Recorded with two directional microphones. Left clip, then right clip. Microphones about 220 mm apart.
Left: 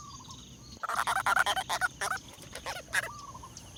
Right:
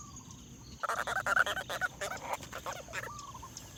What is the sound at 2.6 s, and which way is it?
Fowl, 40° left (ahead or behind).